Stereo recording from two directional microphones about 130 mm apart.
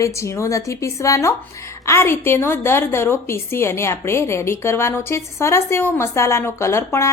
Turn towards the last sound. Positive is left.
turn(degrees=20)  # may be behind; listen again after turning